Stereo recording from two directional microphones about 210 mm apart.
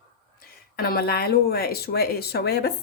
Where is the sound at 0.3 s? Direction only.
45° left (ahead or behind).